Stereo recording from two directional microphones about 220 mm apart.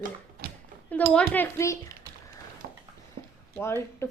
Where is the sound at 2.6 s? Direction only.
40° right (ahead or behind).